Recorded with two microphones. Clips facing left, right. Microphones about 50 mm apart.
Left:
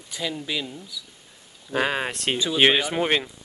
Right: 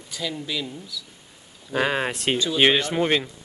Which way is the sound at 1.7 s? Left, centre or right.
Centre.